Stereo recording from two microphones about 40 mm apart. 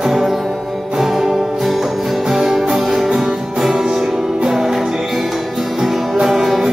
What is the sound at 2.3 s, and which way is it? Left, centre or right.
Music, centre.